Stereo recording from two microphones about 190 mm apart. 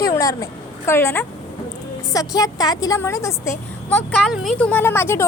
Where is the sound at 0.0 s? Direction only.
20° left (ahead or behind).